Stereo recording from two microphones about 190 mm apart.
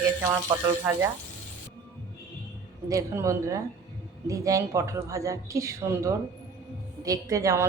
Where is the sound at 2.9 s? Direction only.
15° right (ahead or behind).